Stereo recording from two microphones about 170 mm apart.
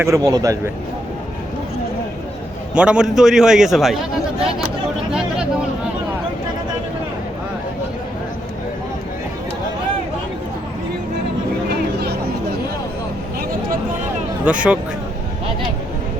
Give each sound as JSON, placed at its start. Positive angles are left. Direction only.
{"t": 0.0, "sound": "a man's voice", "side_deg": -20}
{"t": 2.7, "sound": "a man's voice", "side_deg": -5}
{"t": 11.7, "sound": "music", "side_deg": -70}
{"t": 14.4, "sound": "speech", "side_deg": -5}